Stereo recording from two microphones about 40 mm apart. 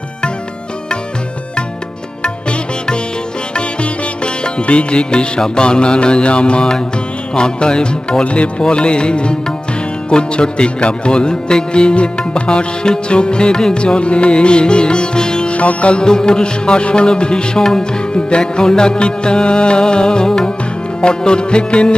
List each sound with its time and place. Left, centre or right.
2.2 s music: left
15.5 s music: left